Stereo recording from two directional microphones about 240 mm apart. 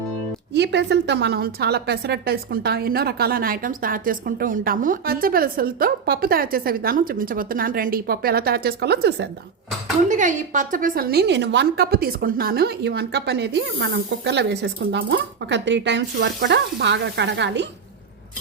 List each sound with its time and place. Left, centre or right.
0.5 s a woman's voice: right
10.1 s a woman's voice: right